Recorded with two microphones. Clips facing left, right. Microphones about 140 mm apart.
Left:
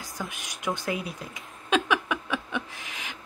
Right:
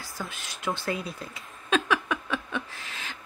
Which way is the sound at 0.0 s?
15° left (ahead or behind).